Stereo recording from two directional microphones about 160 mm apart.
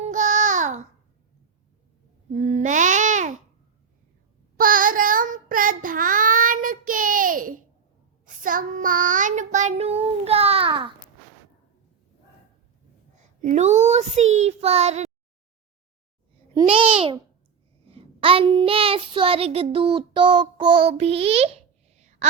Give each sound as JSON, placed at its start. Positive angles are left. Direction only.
{"t": 0.0, "sound": "babbling", "side_deg": -50}
{"t": 2.3, "sound": "babbling", "side_deg": -50}
{"t": 4.5, "sound": "child singing", "side_deg": -60}
{"t": 13.4, "sound": "child singing", "side_deg": -50}
{"t": 16.6, "sound": "babbling", "side_deg": -35}
{"t": 17.9, "sound": "child singing", "side_deg": -35}